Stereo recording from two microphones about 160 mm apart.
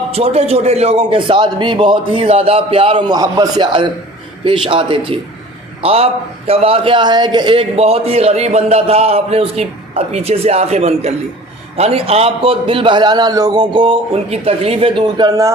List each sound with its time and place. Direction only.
0.1 s a man's voice: 40° right (ahead or behind); by 15.5 s 20° right (ahead or behind)